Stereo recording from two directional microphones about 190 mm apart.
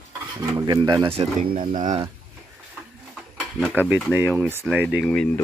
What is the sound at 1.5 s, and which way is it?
Speech, 40° right (ahead or behind).